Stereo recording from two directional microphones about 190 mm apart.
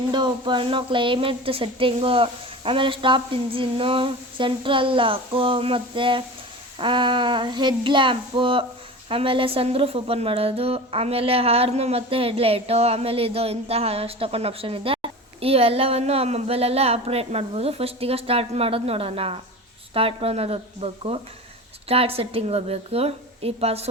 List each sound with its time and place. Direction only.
0.1 s a woman's voice: 25° right (ahead or behind)